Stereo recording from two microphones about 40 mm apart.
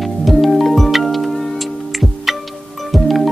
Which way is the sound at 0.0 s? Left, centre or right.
Centre.